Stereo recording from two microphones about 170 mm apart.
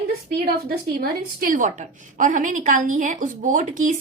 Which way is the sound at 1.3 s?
55° right (ahead or behind).